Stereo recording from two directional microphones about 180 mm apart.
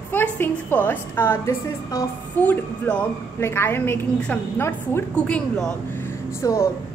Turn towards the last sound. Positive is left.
turn(degrees=20)  # may be behind; listen again after turning